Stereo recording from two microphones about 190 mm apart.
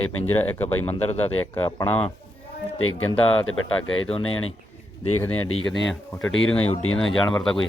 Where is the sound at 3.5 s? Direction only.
90° left.